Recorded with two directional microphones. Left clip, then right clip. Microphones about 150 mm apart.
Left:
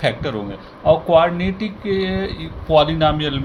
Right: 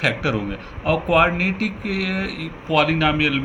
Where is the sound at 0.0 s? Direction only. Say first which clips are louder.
Even; 35° left (ahead or behind).